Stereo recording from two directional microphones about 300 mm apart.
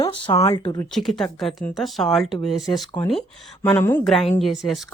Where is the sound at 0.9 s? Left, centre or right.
Centre.